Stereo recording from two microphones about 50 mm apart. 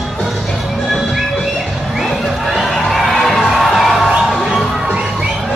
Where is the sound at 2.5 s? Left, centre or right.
Centre.